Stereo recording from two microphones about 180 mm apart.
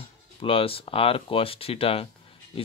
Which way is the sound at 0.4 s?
30° left (ahead or behind).